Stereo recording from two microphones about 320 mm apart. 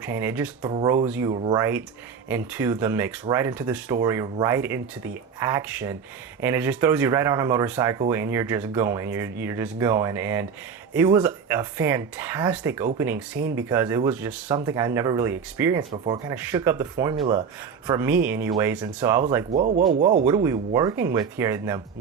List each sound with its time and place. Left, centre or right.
0.0 s speech: centre
19.5 s speech: right
20.2 s speech: centre